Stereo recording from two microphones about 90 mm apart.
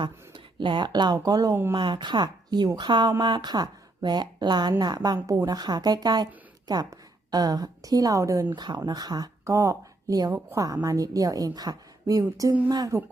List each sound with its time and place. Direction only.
0.0 s speech: 65° right (ahead or behind); by 1.5 s 45° right (ahead or behind)
1.7 s speech: 60° right (ahead or behind); by 8.4 s 35° right (ahead or behind)
8.5 s speech: 50° right (ahead or behind)
9.4 s a woman's voice: 35° right (ahead or behind)